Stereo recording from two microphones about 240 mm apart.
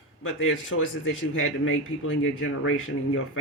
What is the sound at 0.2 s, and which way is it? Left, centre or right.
Speech, left.